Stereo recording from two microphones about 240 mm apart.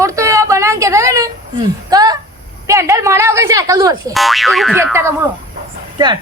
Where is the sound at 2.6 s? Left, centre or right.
Centre.